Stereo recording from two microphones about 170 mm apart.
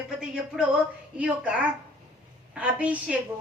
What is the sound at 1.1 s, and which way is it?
A woman's voice, 5° right (ahead or behind).